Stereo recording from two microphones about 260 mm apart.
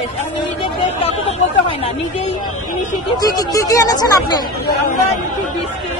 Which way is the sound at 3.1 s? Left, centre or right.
Centre.